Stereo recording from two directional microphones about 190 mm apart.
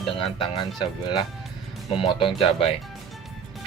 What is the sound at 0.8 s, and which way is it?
Speech, 20° left (ahead or behind).